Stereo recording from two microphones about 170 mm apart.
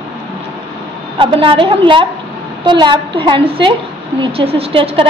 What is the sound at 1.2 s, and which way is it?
A woman's voice, 30° right (ahead or behind).